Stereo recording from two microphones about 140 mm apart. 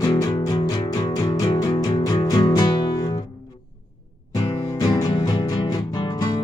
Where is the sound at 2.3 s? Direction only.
30° left (ahead or behind).